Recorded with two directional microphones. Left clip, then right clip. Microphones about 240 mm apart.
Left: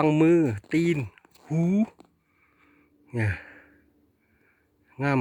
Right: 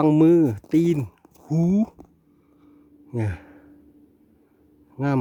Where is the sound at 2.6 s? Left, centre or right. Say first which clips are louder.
Right 8 dB; centre.